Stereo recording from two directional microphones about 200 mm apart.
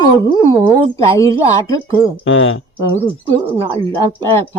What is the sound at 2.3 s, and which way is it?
Speech, 80° left.